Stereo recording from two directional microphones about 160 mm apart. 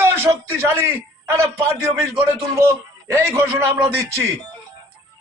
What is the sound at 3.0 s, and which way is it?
Speech, 15° right (ahead or behind).